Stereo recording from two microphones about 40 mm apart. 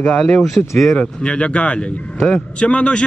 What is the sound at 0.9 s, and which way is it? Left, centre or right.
A man's voice, left.